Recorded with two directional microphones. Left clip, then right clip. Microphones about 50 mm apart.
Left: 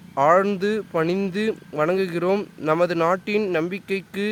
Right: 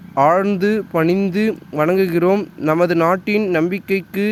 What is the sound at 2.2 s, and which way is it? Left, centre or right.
Speech, centre.